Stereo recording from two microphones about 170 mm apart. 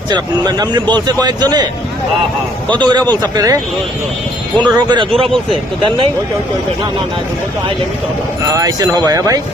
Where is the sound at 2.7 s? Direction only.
25° right (ahead or behind).